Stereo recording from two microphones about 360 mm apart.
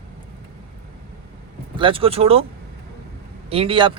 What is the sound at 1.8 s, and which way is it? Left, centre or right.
Speech, centre.